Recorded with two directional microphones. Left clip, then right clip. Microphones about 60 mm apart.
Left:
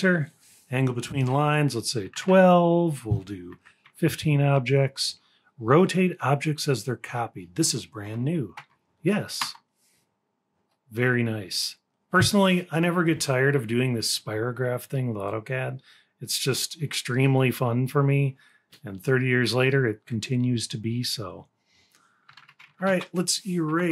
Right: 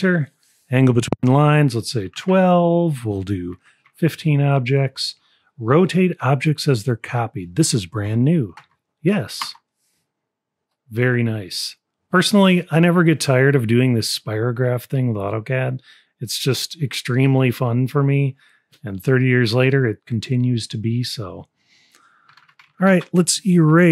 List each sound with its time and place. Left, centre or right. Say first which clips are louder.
0.0 s a sound: right 3 dB; right
0.8 s speech: right 11 dB; right
1.3 s speech: right 7 dB; right; by 3.1 s centre
3.1 s speech: right 10 dB; right
4.0 s speech: right 4 dB; centre
10.9 s speech: right 4 dB; right
23.1 s speech: right 9 dB; right